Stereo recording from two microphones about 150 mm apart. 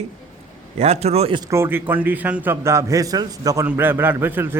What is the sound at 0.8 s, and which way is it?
Speech, 45° right (ahead or behind).